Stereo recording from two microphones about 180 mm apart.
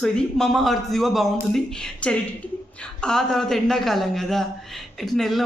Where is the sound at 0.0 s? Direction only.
5° left (ahead or behind).